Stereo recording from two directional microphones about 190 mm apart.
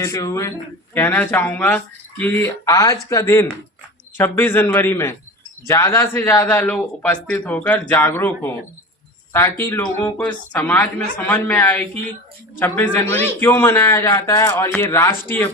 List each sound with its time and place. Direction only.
0.0 s speech: 15° left (ahead or behind)